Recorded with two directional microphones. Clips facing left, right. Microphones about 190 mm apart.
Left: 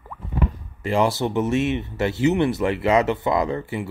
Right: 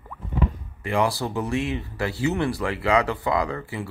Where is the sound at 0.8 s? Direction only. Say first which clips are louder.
Left 3 dB; 25° left (ahead or behind).